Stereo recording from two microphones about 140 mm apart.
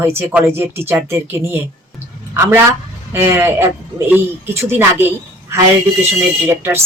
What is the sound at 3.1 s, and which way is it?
Speech, 15° right (ahead or behind).